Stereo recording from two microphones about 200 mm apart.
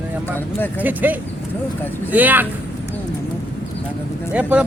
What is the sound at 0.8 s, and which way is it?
Speech, 10° right (ahead or behind).